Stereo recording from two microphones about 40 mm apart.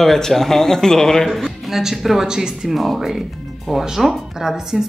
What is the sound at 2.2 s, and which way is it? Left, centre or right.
Speech, centre.